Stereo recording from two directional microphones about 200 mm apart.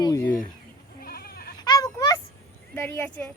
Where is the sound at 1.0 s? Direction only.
50° left (ahead or behind).